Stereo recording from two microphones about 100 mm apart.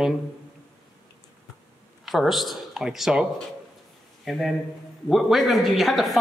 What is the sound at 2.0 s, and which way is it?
Speech, centre (ahead or behind).